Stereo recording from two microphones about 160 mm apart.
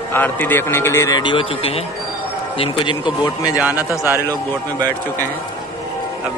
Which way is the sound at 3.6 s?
10° right (ahead or behind).